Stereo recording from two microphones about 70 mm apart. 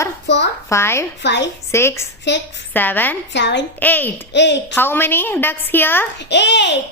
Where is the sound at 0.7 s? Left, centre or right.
Left.